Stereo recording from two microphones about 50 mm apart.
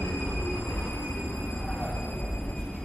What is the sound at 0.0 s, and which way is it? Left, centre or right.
Train, left.